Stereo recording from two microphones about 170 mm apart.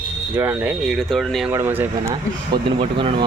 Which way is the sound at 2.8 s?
35° right (ahead or behind).